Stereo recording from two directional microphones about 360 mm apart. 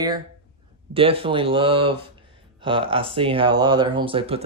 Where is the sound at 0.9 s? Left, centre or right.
Centre.